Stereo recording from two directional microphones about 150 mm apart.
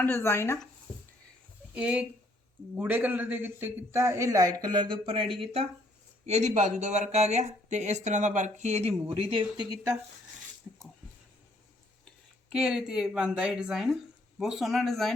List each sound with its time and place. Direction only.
0.0 s speech: 15° left (ahead or behind)
1.7 s a man's voice: 10° right (ahead or behind); by 5.3 s 35° right (ahead or behind)
6.2 s speech: 50° right (ahead or behind)
10.7 s a sound: 15° right (ahead or behind)
12.5 s speech: 5° right (ahead or behind)